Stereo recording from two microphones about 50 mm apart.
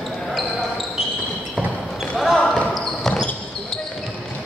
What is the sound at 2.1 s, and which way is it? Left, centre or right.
Basketball bounce, centre.